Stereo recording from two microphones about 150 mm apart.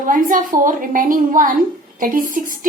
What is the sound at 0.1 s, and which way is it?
A woman's voice, 65° right (ahead or behind).